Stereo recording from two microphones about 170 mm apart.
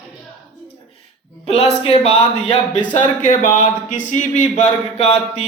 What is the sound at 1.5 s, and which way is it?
Speech, 35° left (ahead or behind).